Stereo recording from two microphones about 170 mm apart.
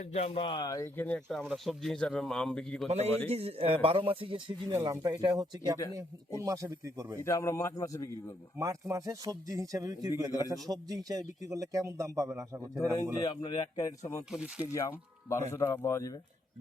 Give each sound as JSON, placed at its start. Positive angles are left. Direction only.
{"t": 0.1, "sound": "speech", "side_deg": 35}
{"t": 1.0, "sound": "speech", "side_deg": 5}
{"t": 2.8, "sound": "speech", "side_deg": -40}
{"t": 4.7, "sound": "speech", "side_deg": -20}
{"t": 7.3, "sound": "a man's voice", "side_deg": 15}
{"t": 8.5, "sound": "speech", "side_deg": -20}
{"t": 12.8, "sound": "a man's voice", "side_deg": 15}
{"t": 13.5, "sound": "speech", "side_deg": 25}
{"t": 14.3, "sound": "speech", "side_deg": -5}
{"t": 14.7, "sound": "a man's voice", "side_deg": 15}